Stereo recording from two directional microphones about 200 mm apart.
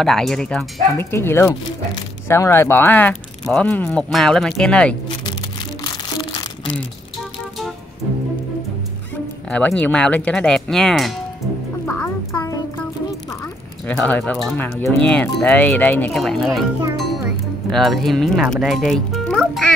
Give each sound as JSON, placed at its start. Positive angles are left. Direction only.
{"t": 0.0, "sound": "speech", "side_deg": 0}
{"t": 5.9, "sound": "crumpling", "side_deg": 20}
{"t": 9.5, "sound": "speech", "side_deg": 5}
{"t": 11.9, "sound": "music", "side_deg": 15}
{"t": 13.8, "sound": "speech", "side_deg": 5}